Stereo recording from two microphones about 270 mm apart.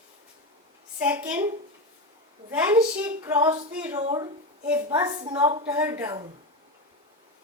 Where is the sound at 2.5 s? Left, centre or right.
Centre.